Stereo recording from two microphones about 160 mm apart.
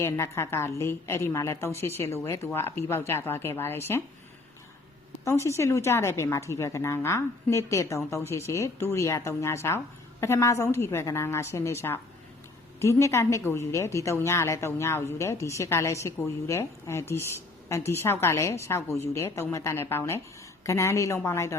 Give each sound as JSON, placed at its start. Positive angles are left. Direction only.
{"t": 0.0, "sound": "a woman's voice", "side_deg": 15}
{"t": 5.2, "sound": "a woman's voice", "side_deg": 15}